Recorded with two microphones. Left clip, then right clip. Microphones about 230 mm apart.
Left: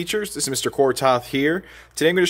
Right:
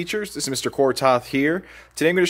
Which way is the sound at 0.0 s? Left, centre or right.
Centre.